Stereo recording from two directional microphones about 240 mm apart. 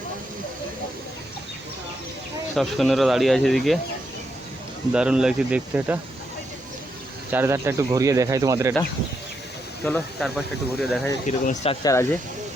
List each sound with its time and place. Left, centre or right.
2.6 s speech: centre
4.9 s speech: centre
7.3 s speech: centre
9.8 s speech: centre
11.3 s speech: left